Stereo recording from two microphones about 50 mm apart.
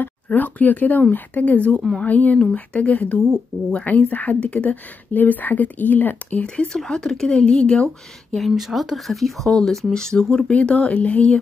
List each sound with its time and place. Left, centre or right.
0.0 s speech: left
6.4 s speech: left
6.7 s speech: centre
7.4 s speech: left
8.4 s speech: centre
10.5 s speech: left